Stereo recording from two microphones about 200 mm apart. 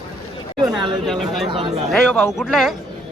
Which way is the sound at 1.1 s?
Centre (ahead or behind).